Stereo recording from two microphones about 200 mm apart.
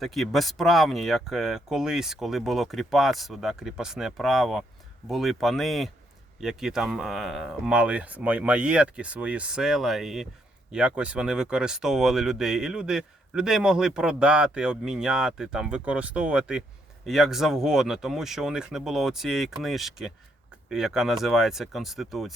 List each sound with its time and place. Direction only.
0.0 s speech: centre (ahead or behind)